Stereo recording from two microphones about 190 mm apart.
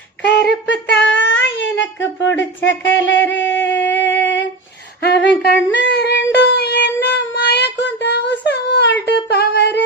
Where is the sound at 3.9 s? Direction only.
70° left (ahead or behind).